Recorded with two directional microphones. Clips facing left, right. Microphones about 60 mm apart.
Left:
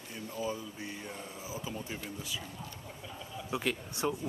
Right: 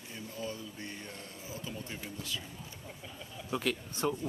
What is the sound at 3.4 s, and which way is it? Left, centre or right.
Speech, centre.